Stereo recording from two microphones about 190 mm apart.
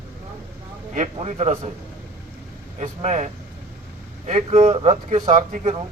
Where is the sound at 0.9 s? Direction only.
40° right (ahead or behind).